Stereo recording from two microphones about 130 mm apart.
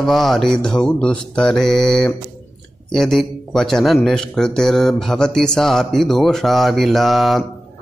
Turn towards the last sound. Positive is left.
turn(degrees=0)  # may be behind; listen again after turning